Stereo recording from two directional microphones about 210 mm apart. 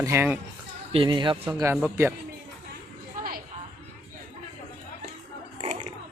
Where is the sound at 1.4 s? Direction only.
10° right (ahead or behind).